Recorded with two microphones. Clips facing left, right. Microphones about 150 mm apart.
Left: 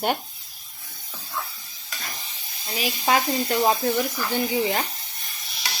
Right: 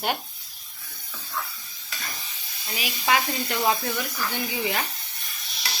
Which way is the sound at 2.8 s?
35° left (ahead or behind).